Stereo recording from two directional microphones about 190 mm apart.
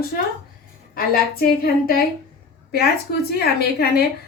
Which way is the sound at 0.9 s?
50° left (ahead or behind).